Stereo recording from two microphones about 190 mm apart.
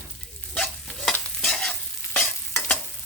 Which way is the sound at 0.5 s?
5° left (ahead or behind).